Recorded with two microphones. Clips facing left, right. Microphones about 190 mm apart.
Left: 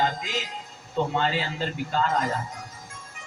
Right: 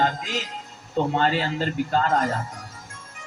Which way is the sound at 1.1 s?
50° right (ahead or behind).